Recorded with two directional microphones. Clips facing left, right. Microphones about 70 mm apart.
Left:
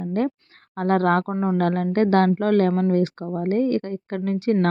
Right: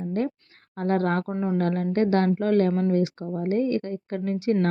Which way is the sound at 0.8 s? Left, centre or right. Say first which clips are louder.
Left 5 dB; left.